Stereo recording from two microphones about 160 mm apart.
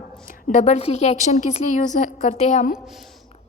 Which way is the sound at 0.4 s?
45° left (ahead or behind).